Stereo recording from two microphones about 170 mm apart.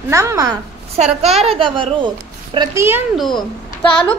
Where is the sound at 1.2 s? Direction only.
35° right (ahead or behind).